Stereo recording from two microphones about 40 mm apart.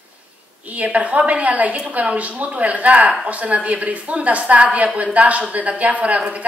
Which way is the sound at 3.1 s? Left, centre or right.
Right.